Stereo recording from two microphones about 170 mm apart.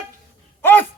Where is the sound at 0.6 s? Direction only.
10° left (ahead or behind).